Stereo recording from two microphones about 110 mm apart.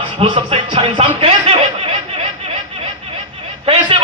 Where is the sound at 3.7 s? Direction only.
55° right (ahead or behind).